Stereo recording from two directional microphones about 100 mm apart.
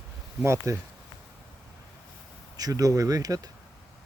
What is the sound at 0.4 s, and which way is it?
Speech, 30° right (ahead or behind).